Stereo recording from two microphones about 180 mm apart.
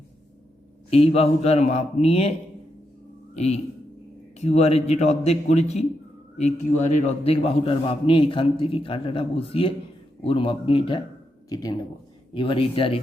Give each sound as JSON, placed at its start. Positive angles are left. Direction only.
{"t": 0.9, "sound": "a man's voice", "side_deg": 35}
{"t": 3.3, "sound": "a man's voice", "side_deg": 35}